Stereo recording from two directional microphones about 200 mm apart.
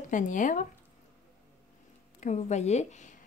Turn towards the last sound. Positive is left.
turn(degrees=35)  # may be behind; listen again after turning